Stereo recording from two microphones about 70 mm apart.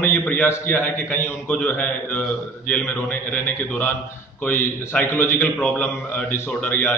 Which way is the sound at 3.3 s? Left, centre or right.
Left.